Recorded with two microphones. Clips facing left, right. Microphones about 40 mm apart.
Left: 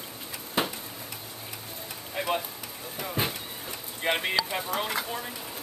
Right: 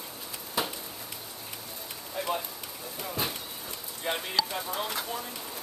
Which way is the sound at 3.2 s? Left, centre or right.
Left.